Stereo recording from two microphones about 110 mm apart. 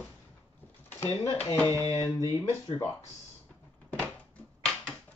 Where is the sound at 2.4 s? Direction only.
40° left (ahead or behind).